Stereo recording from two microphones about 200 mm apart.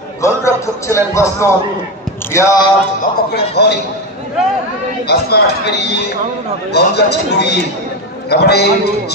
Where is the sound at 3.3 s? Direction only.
55° left (ahead or behind).